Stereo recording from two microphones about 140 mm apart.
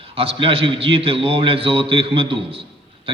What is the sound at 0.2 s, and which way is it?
A man's voice, 45° right (ahead or behind).